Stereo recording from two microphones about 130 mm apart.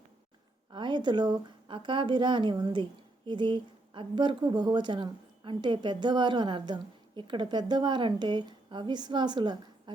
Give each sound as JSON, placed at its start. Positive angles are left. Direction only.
{"t": 0.7, "sound": "a woman's voice", "side_deg": -35}